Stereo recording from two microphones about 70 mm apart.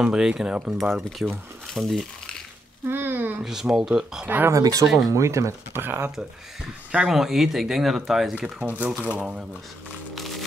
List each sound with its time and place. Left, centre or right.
0.0 s speech: centre
1.7 s crumpling: centre
2.9 s speech: right
3.4 s speech: centre
4.5 s speech: right
5.8 s speech: right
7.1 s speech: centre
8.4 s speech: right